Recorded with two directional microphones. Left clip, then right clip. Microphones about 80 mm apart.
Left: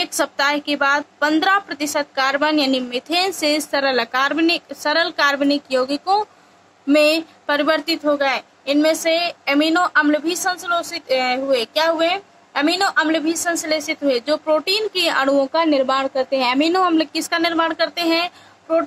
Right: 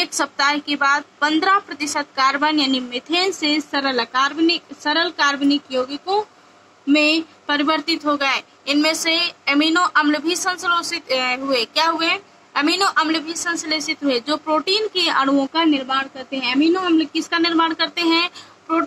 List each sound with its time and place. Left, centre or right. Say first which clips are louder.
0.0 s a woman's voice: even; centre; by 6.2 s left
6.9 s a sound: left 2 dB; left
7.5 s a woman's voice: left 1 dB; left
8.1 s a woman's voice: left 2 dB; centre; by 15.3 s left
15.3 s a woman's voice: left 2 dB; left
17.3 s a woman's voice: right 1 dB; left